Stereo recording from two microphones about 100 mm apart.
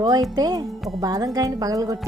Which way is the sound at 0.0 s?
40° right (ahead or behind).